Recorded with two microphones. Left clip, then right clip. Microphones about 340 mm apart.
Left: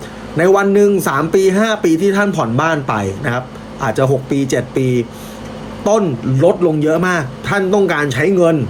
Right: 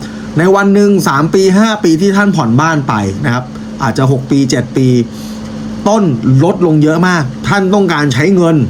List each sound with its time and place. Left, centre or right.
0.3 s speech: centre